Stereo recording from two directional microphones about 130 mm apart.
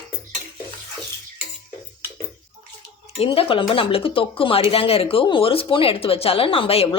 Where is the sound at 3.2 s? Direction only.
45° left (ahead or behind).